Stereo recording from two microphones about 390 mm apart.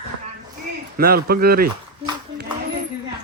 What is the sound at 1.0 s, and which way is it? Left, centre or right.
Speech, right.